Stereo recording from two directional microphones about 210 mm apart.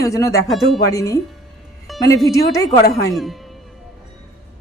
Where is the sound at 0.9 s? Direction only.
15° left (ahead or behind).